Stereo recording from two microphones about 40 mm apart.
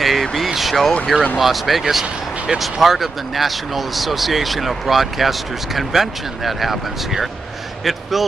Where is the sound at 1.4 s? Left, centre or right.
Centre.